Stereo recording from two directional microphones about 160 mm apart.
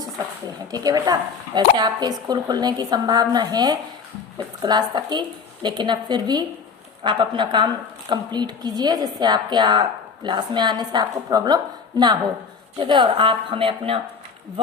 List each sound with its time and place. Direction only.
0.7 s a woman's voice: 25° right (ahead or behind)